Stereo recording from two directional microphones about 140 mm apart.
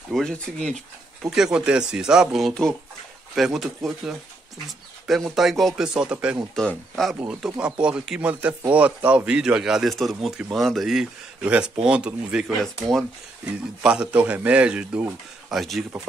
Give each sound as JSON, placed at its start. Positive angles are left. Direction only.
{"t": 0.1, "sound": "speech", "side_deg": 5}
{"t": 7.2, "sound": "a man's voice", "side_deg": -5}
{"t": 13.8, "sound": "a man's voice", "side_deg": -5}
{"t": 15.5, "sound": "speech", "side_deg": 0}